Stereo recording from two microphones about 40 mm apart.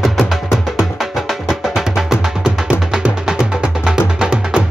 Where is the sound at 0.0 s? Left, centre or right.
Centre.